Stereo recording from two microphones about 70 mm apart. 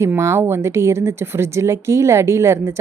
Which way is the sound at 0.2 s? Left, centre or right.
Right.